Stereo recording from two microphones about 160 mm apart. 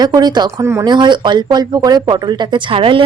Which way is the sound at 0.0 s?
25° right (ahead or behind).